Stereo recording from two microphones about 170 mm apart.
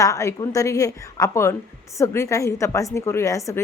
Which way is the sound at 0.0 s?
20° left (ahead or behind).